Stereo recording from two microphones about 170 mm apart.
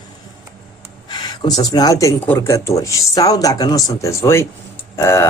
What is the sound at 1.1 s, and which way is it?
Speech, 25° left (ahead or behind).